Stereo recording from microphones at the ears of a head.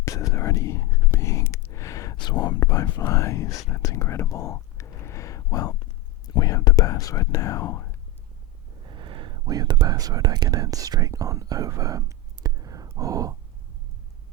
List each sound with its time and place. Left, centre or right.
0.0 s whispering: left
8.7 s speech: right